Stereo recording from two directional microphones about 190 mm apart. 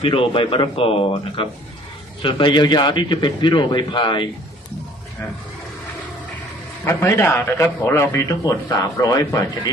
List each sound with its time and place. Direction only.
0.0 s a man's voice: 30° left (ahead or behind)
6.8 s a man's voice: 10° left (ahead or behind)